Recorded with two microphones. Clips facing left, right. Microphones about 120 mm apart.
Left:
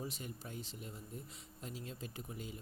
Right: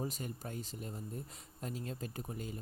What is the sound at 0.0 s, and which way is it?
Speech, 45° right (ahead or behind).